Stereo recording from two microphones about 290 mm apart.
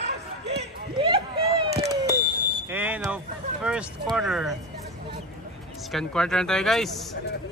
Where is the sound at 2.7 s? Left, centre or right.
Centre.